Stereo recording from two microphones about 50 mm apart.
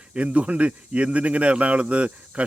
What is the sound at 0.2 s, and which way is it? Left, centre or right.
Speech, right.